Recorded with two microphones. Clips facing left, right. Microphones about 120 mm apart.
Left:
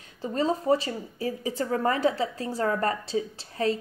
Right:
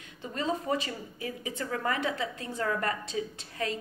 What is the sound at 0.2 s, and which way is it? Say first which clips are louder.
A woman's voice: left 6 dB; 35° left (ahead or behind).